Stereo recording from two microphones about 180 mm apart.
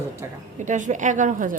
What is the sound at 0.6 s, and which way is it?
Speech, 45° right (ahead or behind).